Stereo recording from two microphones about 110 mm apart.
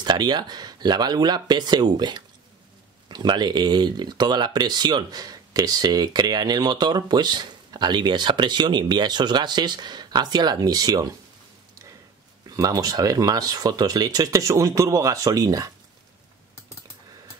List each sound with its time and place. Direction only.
0.0 s speech: 40° right (ahead or behind)
12.4 s speech: 35° right (ahead or behind)